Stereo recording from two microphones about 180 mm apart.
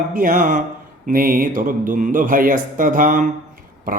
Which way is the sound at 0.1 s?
50° right (ahead or behind).